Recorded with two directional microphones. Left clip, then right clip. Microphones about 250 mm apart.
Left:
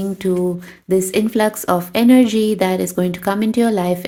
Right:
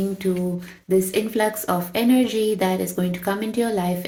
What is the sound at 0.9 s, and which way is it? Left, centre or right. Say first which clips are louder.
Speech: left 4 dB; left.